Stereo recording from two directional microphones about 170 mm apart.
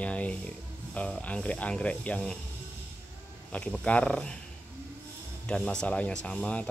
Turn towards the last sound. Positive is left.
turn(degrees=5)  # may be behind; listen again after turning